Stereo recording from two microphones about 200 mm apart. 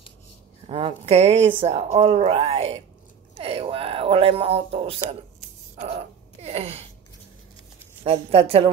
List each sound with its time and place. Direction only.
0.7 s speech: 25° right (ahead or behind)
6.4 s a sound: 30° right (ahead or behind)
8.0 s a woman's voice: 30° right (ahead or behind)